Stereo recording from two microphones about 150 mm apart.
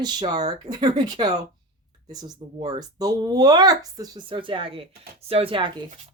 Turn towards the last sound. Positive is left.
turn(degrees=-35)  # may be behind; listen again after turning